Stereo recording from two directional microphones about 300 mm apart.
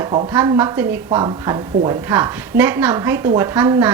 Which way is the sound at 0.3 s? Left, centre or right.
Centre.